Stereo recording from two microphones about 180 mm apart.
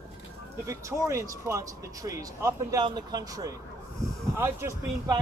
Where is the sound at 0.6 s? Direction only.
15° right (ahead or behind).